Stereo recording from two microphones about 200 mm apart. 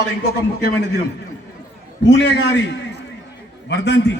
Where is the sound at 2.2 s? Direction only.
65° left (ahead or behind).